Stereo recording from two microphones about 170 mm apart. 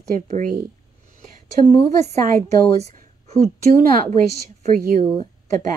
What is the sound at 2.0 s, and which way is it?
A woman's voice, 40° right (ahead or behind).